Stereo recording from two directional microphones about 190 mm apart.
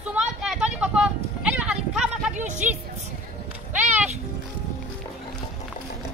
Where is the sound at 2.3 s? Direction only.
40° right (ahead or behind).